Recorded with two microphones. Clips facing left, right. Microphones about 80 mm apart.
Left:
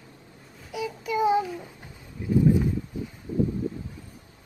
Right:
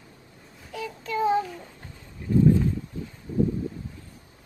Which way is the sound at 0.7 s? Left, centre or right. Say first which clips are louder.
Left 2 dB; centre.